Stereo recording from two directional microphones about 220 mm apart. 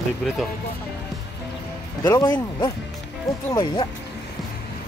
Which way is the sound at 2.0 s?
15° left (ahead or behind).